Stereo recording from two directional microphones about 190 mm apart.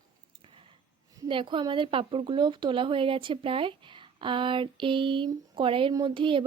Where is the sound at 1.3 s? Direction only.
25° right (ahead or behind).